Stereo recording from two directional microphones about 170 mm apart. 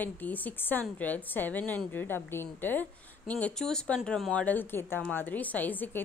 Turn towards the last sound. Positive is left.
turn(degrees=10)  # may be behind; listen again after turning